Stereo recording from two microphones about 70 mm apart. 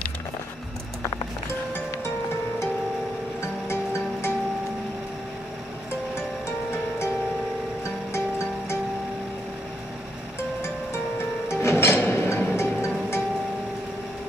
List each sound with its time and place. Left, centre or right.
11.4 s music: left